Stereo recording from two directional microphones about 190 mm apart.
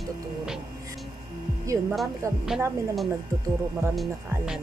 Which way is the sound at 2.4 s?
Centre (ahead or behind).